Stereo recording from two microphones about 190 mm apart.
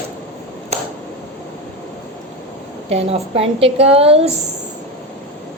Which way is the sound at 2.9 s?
30° right (ahead or behind).